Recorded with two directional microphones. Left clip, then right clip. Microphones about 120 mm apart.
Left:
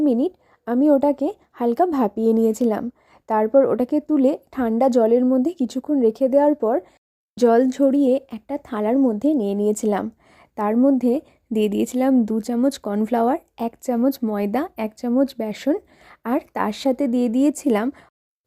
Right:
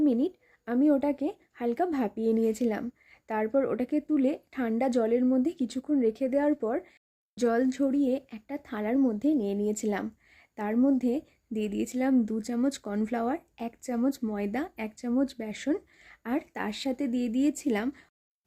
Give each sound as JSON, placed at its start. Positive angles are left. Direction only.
{"t": 0.0, "sound": "a woman's voice", "side_deg": 35}
{"t": 6.5, "sound": "speech", "side_deg": 25}
{"t": 7.3, "sound": "a woman's voice", "side_deg": 45}
{"t": 11.5, "sound": "a woman's voice", "side_deg": 60}